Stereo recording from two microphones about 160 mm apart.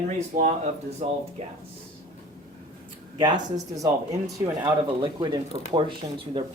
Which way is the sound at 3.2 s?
25° right (ahead or behind).